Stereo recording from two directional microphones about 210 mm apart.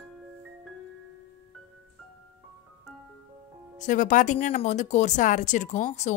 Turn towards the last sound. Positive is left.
turn(degrees=35)  # may be behind; listen again after turning